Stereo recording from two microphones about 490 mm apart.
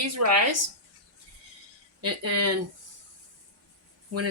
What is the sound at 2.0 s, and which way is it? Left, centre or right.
Speech, right.